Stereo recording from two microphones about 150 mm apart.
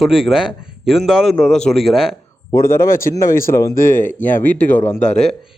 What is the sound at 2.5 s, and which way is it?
Speech, 20° left (ahead or behind).